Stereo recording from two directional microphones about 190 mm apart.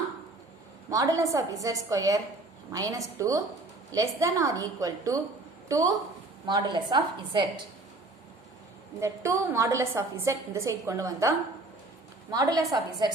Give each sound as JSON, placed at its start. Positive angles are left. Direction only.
{"t": 0.9, "sound": "a woman's voice", "side_deg": -15}
{"t": 9.0, "sound": "a woman's voice", "side_deg": -15}